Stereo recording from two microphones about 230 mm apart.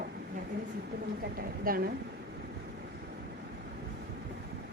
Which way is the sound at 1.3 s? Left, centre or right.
Right.